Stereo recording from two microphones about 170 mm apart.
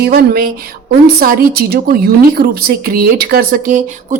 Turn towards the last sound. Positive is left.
turn(degrees=-45)  # may be behind; listen again after turning